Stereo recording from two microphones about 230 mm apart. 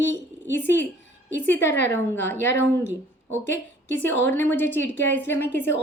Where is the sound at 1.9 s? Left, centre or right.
Centre.